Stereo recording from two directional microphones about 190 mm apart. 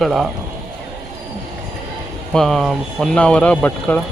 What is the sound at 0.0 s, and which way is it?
Speech, centre (ahead or behind).